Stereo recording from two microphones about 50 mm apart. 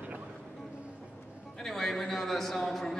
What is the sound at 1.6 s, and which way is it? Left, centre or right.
A man's voice, centre.